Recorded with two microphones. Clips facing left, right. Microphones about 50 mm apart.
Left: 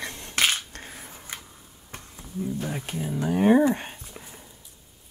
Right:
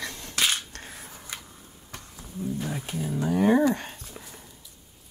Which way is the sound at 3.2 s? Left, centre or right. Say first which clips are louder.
Left 2 dB; left.